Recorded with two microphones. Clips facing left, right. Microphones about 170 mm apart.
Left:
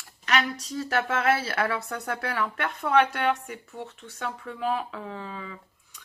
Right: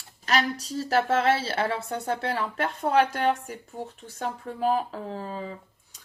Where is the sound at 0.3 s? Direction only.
35° right (ahead or behind).